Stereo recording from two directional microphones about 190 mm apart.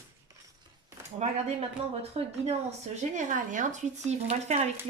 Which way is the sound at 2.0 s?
35° right (ahead or behind).